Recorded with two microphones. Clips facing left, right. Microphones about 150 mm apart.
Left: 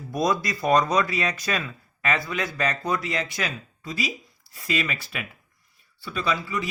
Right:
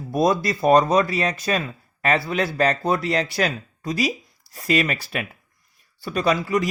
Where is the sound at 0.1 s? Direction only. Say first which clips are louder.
Right 5 dB; 30° right (ahead or behind).